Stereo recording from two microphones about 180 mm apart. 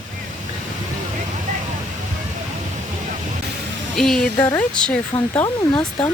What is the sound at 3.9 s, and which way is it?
Speech, centre (ahead or behind).